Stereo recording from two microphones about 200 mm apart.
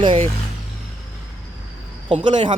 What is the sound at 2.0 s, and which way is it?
Speech, 25° right (ahead or behind).